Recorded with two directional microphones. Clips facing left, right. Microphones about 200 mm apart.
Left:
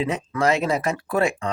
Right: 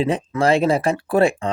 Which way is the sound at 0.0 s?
30° right (ahead or behind).